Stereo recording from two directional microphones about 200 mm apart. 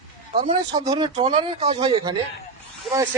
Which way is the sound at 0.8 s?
20° right (ahead or behind).